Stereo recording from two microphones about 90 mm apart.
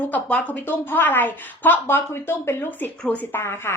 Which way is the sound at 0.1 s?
15° left (ahead or behind).